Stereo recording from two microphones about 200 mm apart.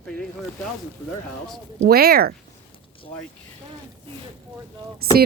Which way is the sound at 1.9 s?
50° right (ahead or behind).